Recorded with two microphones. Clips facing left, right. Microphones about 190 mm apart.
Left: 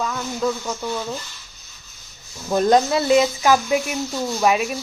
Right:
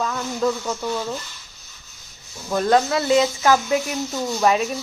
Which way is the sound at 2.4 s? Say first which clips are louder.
Left 2 dB; 20° left (ahead or behind).